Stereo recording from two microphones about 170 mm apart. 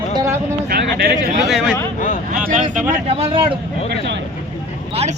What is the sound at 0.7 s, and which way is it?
Speech, 75° right (ahead or behind).